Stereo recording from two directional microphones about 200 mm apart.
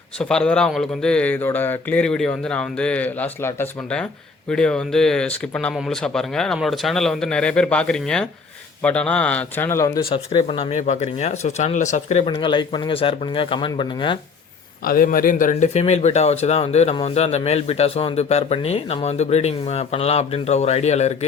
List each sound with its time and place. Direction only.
0.2 s speech: 5° left (ahead or behind)
10.0 s speech: 30° left (ahead or behind)
14.8 s speech: 45° left (ahead or behind)